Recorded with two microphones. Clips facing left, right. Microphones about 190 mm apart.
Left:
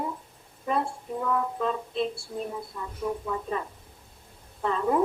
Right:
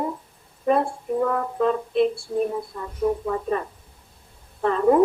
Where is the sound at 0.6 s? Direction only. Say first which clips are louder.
Right 7 dB; 55° right (ahead or behind).